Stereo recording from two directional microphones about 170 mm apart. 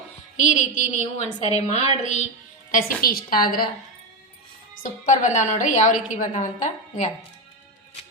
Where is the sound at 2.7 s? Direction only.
55° left (ahead or behind).